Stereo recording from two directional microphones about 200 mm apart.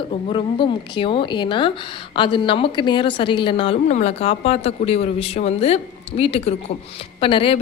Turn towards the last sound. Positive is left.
turn(degrees=25)  # may be behind; listen again after turning